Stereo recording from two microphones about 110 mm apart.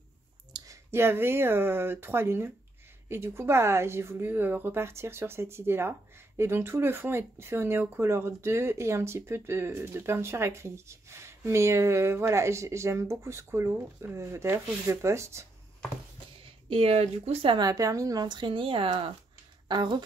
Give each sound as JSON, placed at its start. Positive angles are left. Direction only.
{"t": 0.5, "sound": "a sound", "side_deg": -40}
{"t": 0.9, "sound": "speech", "side_deg": -20}
{"t": 16.6, "sound": "speech", "side_deg": -60}
{"t": 17.6, "sound": "speech", "side_deg": -35}